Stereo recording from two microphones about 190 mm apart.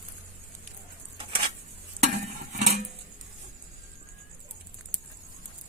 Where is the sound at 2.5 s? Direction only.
40° right (ahead or behind).